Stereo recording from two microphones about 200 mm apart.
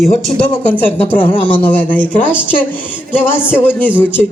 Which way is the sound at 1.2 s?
25° left (ahead or behind).